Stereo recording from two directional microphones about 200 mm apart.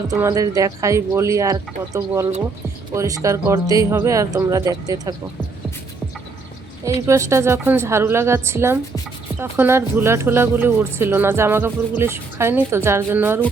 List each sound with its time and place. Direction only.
0.1 s speech: 15° right (ahead or behind)
7.1 s speech: 15° right (ahead or behind)